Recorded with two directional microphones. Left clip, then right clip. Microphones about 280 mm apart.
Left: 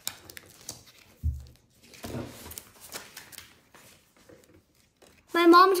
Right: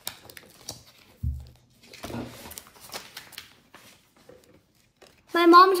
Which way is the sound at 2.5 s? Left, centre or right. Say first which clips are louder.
Right 3 dB; right.